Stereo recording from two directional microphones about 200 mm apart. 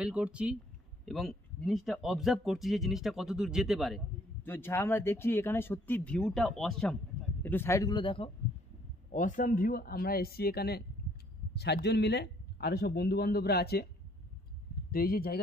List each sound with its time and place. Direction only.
0.0 s speech: 5° right (ahead or behind)
4.5 s speech: 10° left (ahead or behind)
9.1 s a man's voice: 40° left (ahead or behind)
14.9 s a man's voice: 45° left (ahead or behind)